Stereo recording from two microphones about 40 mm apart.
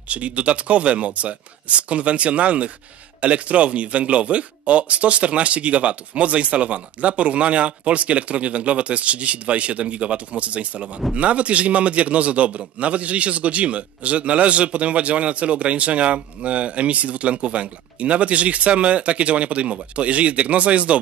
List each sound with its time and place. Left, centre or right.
0.1 s a man's voice: right